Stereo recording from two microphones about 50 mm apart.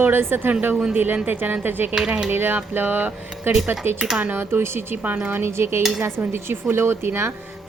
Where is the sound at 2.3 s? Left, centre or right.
Right.